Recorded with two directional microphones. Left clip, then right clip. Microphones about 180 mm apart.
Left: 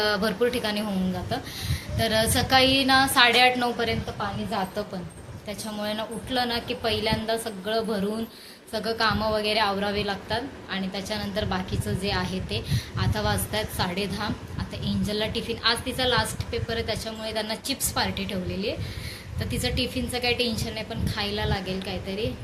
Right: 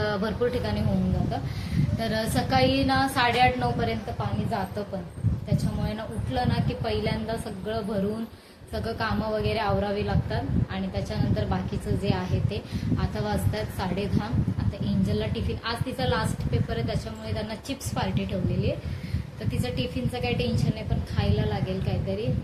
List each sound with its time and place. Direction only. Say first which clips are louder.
0.0 s a woman's voice: left 3 dB; 5° left (ahead or behind)
2.0 s a woman's voice: left 5 dB; 5° left (ahead or behind)
5.8 s a woman's voice: left 4 dB; 10° left (ahead or behind)
13.0 s a woman's voice: left 5 dB; 5° left (ahead or behind)